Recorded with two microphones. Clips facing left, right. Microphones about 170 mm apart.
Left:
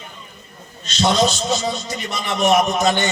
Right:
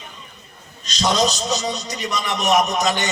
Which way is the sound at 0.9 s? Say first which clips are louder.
Left 2 dB; 40° right (ahead or behind).